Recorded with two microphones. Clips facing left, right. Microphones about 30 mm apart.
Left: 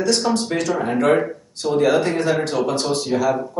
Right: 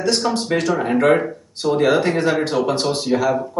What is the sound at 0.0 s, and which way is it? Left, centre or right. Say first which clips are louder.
Speech: even; centre.